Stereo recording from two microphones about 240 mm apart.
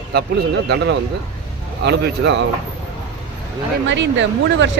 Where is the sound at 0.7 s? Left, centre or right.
Right.